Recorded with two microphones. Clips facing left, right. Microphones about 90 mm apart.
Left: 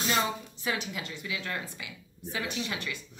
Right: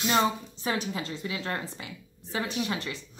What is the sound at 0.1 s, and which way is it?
Speech, 35° right (ahead or behind).